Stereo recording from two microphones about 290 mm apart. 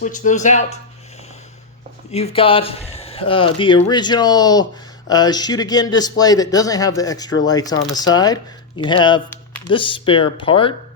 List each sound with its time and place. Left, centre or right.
0.0 s speech: left
2.1 s a man's voice: centre